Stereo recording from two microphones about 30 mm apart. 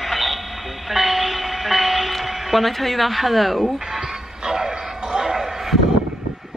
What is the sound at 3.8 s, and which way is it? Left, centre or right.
Music, centre.